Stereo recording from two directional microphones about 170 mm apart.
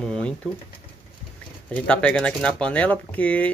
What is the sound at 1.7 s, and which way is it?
Speech, 5° left (ahead or behind).